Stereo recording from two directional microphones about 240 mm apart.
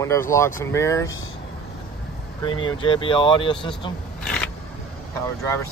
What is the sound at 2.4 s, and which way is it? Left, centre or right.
Speech, centre.